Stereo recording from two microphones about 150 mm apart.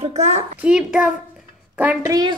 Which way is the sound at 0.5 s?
5° right (ahead or behind).